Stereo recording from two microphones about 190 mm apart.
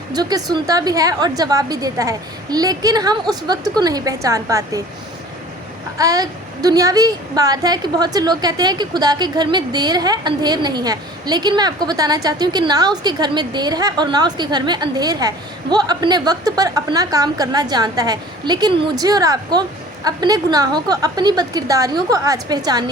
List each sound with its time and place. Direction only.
0.1 s a woman's voice: 20° right (ahead or behind)
6.0 s a woman's voice: 20° right (ahead or behind)